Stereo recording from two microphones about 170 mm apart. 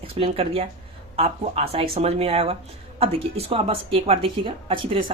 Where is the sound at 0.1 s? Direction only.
35° right (ahead or behind).